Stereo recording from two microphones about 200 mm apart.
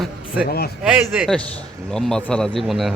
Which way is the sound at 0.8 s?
5° right (ahead or behind).